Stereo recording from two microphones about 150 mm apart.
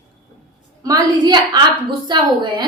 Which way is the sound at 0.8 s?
25° right (ahead or behind).